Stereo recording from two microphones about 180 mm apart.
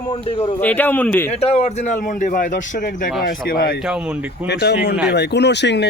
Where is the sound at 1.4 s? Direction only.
35° left (ahead or behind); by 3.7 s 55° left (ahead or behind).